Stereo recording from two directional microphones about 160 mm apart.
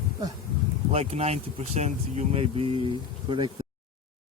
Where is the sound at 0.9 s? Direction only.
40° right (ahead or behind).